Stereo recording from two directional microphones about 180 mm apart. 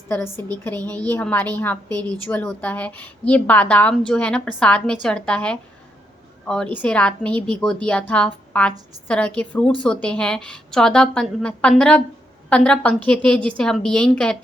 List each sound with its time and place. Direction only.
0.1 s a woman's voice: 15° left (ahead or behind)